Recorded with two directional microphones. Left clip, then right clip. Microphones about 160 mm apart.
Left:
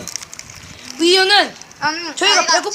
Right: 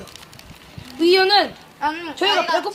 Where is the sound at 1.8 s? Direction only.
45° right (ahead or behind).